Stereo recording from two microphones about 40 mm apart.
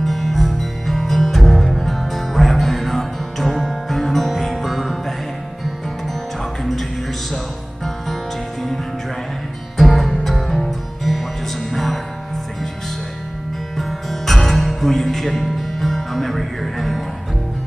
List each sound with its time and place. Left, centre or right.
0.0 s music: centre
9.8 s music: centre
13.7 s music: centre